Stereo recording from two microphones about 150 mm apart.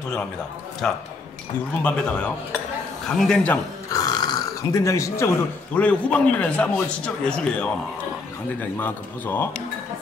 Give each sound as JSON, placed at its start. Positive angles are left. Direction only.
{"t": 0.8, "sound": "a man's voice", "side_deg": 5}
{"t": 3.9, "sound": "speech", "side_deg": 25}
{"t": 5.8, "sound": "a man's voice", "side_deg": 10}